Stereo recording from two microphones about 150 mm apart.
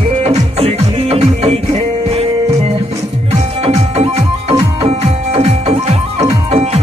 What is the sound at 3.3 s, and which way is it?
Music, 40° right (ahead or behind).